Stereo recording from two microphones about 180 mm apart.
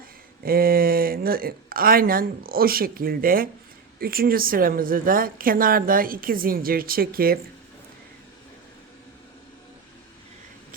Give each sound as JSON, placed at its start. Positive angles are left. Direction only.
{"t": 0.4, "sound": "a woman's voice", "side_deg": -55}